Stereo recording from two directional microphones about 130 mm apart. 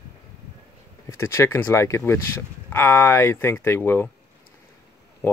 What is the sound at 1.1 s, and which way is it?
Speech, 20° left (ahead or behind).